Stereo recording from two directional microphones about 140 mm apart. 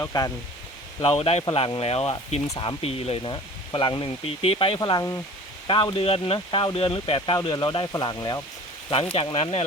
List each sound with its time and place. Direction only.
0.0 s speech: 25° left (ahead or behind)
1.0 s speech: 45° left (ahead or behind)
2.5 s speech: 35° left (ahead or behind)
4.8 s speech: 25° left (ahead or behind)
5.9 s speech: 40° left (ahead or behind)
9.1 s speech: 45° left (ahead or behind)